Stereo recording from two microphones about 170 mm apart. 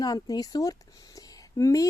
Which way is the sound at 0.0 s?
20° left (ahead or behind).